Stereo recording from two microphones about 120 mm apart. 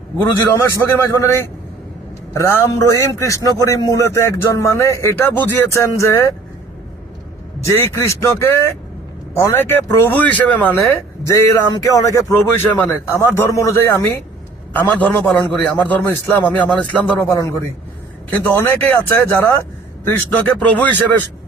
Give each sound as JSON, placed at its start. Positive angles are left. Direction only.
{"t": 0.2, "sound": "a man's voice", "side_deg": 20}
{"t": 7.7, "sound": "a man's voice", "side_deg": 25}
{"t": 11.3, "sound": "a man's voice", "side_deg": 25}
{"t": 17.2, "sound": "a man's voice", "side_deg": 25}